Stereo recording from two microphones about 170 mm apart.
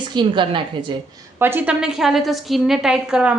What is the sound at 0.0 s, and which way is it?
Speech, 25° right (ahead or behind).